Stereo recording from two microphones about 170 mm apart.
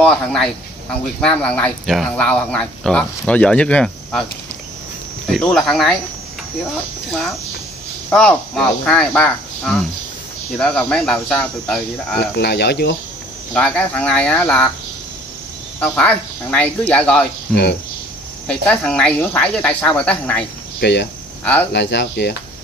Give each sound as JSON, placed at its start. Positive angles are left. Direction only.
{"t": 0.0, "sound": "cricket", "side_deg": 5}
{"t": 1.2, "sound": "speech", "side_deg": 5}
{"t": 5.2, "sound": "cricket", "side_deg": 5}
{"t": 7.1, "sound": "speech", "side_deg": 0}
{"t": 8.1, "sound": "cricket", "side_deg": 5}
{"t": 10.9, "sound": "cricket", "side_deg": 0}
{"t": 12.4, "sound": "speech", "side_deg": 85}
{"t": 13.5, "sound": "speech", "side_deg": 5}
{"t": 15.8, "sound": "speech", "side_deg": 10}
{"t": 17.5, "sound": "cricket", "side_deg": 5}
{"t": 18.5, "sound": "speech", "side_deg": 5}
{"t": 20.8, "sound": "speech", "side_deg": 90}